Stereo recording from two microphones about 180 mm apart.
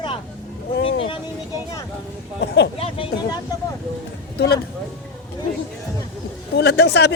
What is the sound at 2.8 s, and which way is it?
Speech, 30° left (ahead or behind).